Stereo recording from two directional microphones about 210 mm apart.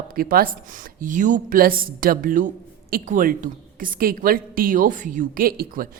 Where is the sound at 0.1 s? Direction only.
45° right (ahead or behind).